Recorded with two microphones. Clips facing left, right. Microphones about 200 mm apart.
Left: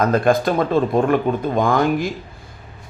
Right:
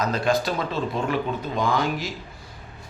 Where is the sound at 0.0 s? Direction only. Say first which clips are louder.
Left 7 dB; 55° left (ahead or behind).